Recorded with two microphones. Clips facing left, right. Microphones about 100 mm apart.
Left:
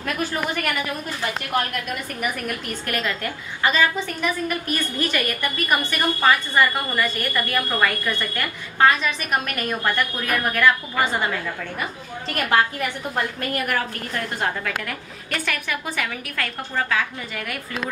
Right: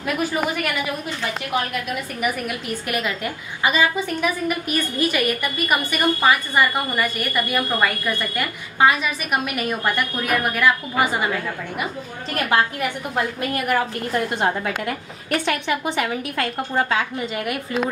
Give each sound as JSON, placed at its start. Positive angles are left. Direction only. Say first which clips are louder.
{"t": 0.0, "sound": "a woman's voice", "louder": "right 3 dB", "side_deg": -10}
{"t": 13.1, "sound": "a woman's voice", "louder": "right 2 dB", "side_deg": -10}
{"t": 14.1, "sound": "a woman's voice", "louder": "right 4 dB", "side_deg": -25}